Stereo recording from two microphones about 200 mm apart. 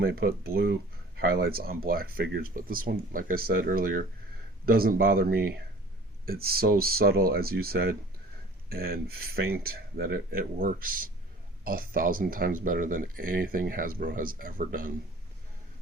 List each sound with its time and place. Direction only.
0.0 s speech: 50° right (ahead or behind)